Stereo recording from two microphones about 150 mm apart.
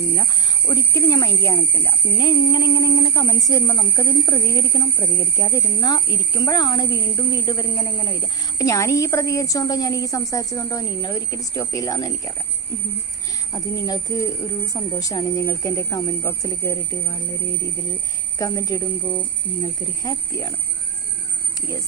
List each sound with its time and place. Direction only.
0.7 s speech: 25° left (ahead or behind)
13.5 s speech: 25° left (ahead or behind)
18.3 s speech: 20° left (ahead or behind)